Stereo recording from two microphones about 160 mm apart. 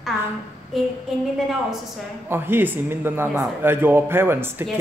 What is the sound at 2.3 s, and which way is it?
A woman's voice, 15° right (ahead or behind).